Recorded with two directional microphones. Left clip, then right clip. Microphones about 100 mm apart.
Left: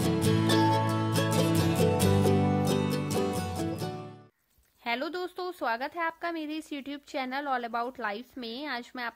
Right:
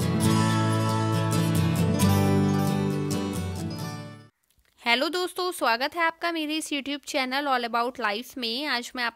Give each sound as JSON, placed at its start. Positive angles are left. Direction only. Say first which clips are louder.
{"t": 0.0, "sound": "music", "louder": "right 2 dB", "side_deg": 0}
{"t": 4.8, "sound": "a woman's voice", "louder": "right 8 dB", "side_deg": -40}